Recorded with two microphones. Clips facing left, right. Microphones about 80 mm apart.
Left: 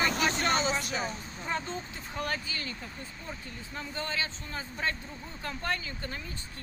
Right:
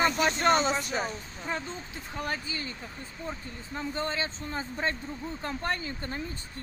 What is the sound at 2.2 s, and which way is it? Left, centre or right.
Speech, centre.